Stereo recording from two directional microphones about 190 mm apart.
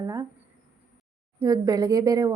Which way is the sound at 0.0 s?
20° right (ahead or behind).